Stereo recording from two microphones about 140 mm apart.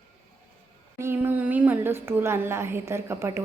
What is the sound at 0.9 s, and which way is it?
A woman's voice, 15° right (ahead or behind).